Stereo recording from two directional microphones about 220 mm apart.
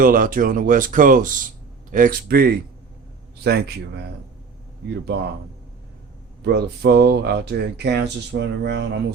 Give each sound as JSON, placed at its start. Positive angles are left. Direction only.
{"t": 0.0, "sound": "speech", "side_deg": -40}
{"t": 5.1, "sound": "speech", "side_deg": -50}
{"t": 6.4, "sound": "speech", "side_deg": -50}